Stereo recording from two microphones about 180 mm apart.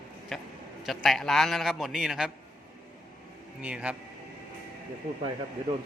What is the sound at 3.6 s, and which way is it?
Speech, 5° right (ahead or behind).